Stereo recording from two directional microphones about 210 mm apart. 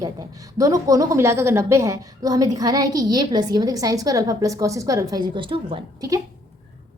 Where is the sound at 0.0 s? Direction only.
15° right (ahead or behind).